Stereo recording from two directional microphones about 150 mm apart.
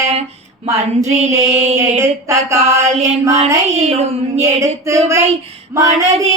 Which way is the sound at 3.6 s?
45° right (ahead or behind).